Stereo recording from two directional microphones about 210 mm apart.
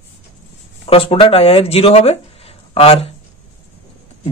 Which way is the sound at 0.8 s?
25° left (ahead or behind).